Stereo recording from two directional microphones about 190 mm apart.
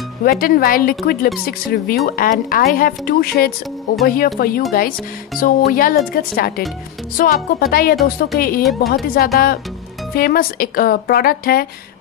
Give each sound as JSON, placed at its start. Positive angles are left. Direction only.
{"t": 0.2, "sound": "speech", "side_deg": 50}